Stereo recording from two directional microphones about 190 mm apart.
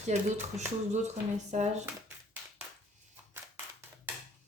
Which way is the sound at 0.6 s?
40° right (ahead or behind).